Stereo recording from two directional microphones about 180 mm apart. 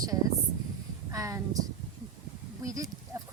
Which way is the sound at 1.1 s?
20° right (ahead or behind).